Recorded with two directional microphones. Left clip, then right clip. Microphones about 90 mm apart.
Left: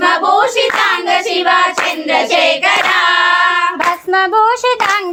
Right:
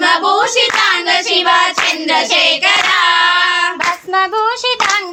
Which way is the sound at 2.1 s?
Centre (ahead or behind).